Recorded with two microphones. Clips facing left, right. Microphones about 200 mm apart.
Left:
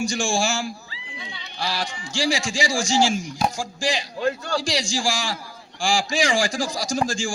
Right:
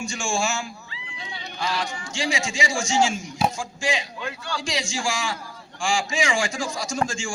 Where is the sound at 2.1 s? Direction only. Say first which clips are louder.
Left 3 dB; 35° left (ahead or behind).